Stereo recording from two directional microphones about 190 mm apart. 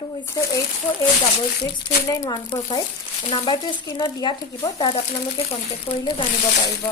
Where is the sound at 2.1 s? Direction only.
20° left (ahead or behind).